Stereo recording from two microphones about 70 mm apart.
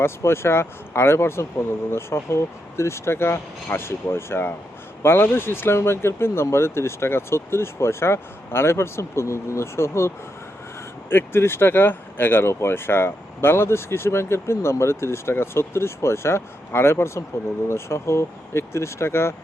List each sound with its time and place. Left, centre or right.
0.0 s speech: left
11.1 s speech: left